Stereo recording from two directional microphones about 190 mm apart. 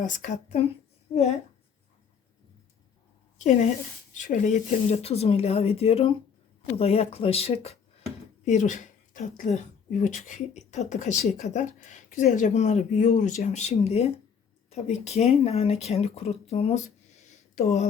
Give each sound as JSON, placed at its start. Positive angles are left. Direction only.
{"t": 0.0, "sound": "a woman's voice", "side_deg": 40}
{"t": 3.3, "sound": "a woman's voice", "side_deg": 40}